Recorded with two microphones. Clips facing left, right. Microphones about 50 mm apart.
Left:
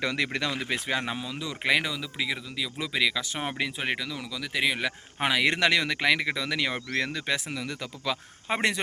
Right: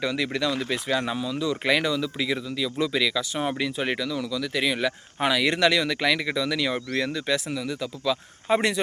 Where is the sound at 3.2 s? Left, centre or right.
Left.